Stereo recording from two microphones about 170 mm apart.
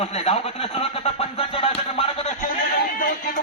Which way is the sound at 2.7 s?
65° left (ahead or behind).